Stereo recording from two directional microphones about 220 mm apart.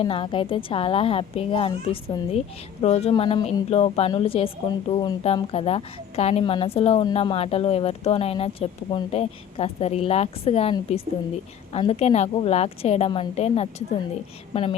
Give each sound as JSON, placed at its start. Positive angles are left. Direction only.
{"t": 0.0, "sound": "a woman's voice", "side_deg": 25}